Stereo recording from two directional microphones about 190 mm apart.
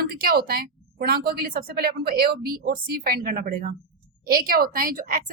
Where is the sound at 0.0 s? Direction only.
50° right (ahead or behind).